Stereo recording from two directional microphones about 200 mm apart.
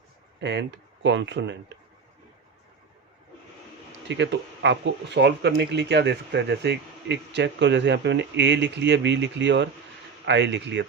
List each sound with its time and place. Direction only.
0.3 s speech: 60° right (ahead or behind)
4.1 s speech: 60° right (ahead or behind)